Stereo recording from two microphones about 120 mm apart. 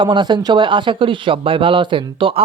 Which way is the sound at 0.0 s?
40° right (ahead or behind).